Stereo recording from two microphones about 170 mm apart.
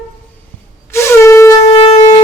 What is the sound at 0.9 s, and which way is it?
Shofar, 15° left (ahead or behind).